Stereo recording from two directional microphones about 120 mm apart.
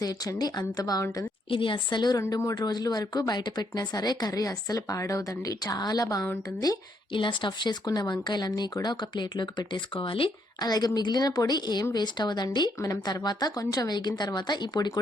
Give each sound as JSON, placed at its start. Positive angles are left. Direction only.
{"t": 0.0, "sound": "speech", "side_deg": 30}
{"t": 1.5, "sound": "speech", "side_deg": 45}
{"t": 2.2, "sound": "speech", "side_deg": 25}
{"t": 7.1, "sound": "speech", "side_deg": 45}
{"t": 10.6, "sound": "speech", "side_deg": 35}